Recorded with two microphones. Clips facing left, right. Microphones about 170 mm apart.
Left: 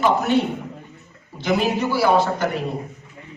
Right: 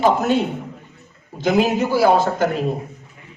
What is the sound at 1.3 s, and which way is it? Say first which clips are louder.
Speech: right 3 dB; 45° right (ahead or behind).